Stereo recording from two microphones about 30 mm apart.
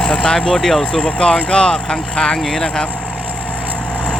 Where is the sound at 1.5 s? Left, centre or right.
Left.